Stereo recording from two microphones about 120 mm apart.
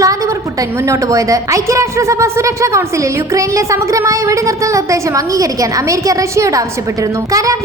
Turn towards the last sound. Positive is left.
turn(degrees=-30)  # may be behind; listen again after turning